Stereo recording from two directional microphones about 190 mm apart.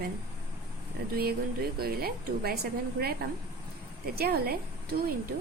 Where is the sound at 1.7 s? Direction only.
55° right (ahead or behind).